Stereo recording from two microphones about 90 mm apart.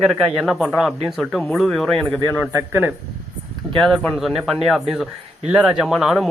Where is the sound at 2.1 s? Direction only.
20° left (ahead or behind).